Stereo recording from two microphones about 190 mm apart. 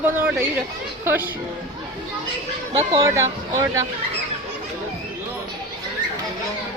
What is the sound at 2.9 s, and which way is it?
Speech, 15° right (ahead or behind).